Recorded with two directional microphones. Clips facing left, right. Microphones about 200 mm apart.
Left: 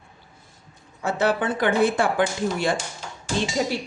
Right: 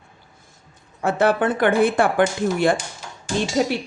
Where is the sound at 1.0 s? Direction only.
55° right (ahead or behind).